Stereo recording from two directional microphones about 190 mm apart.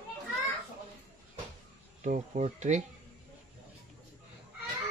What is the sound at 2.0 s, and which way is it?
Speech, 40° right (ahead or behind).